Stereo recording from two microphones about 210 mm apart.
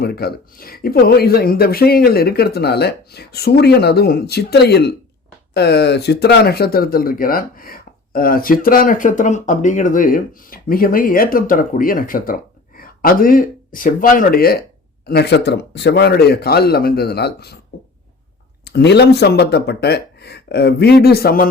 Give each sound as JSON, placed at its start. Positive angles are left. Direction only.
{"t": 0.0, "sound": "speech", "side_deg": 50}
{"t": 18.6, "sound": "speech", "side_deg": 50}